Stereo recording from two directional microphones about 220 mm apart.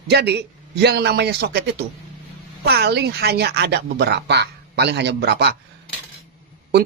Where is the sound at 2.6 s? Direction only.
45° right (ahead or behind).